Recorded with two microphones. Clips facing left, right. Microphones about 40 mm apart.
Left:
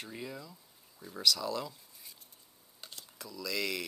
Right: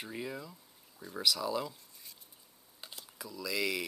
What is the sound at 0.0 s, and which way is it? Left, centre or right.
Speech, centre.